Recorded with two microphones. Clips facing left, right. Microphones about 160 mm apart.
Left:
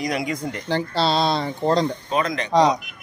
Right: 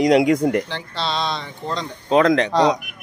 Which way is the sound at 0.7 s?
40° left (ahead or behind).